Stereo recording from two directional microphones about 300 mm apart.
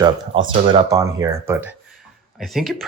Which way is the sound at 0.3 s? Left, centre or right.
Centre.